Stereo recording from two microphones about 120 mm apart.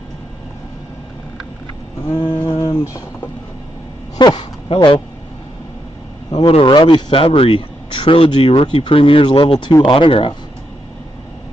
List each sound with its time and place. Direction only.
2.2 s a sound: 40° left (ahead or behind)
2.7 s speech: 25° left (ahead or behind)
4.2 s speech: 40° left (ahead or behind)
6.3 s speech: 45° left (ahead or behind)